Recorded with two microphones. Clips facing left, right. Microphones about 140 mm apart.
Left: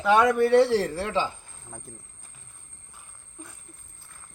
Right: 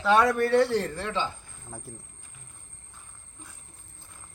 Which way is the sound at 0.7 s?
35° left (ahead or behind).